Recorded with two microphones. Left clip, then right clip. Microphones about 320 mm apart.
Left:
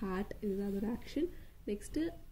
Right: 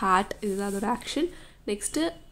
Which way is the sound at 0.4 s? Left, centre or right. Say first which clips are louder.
Right 9 dB; right.